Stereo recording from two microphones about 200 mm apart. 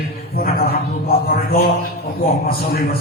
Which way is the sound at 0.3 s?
50° left (ahead or behind).